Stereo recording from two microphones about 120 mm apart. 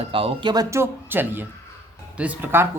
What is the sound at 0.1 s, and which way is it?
Speech, 50° right (ahead or behind).